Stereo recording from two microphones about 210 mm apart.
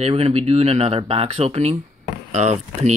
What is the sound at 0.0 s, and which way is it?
Speech, 30° right (ahead or behind).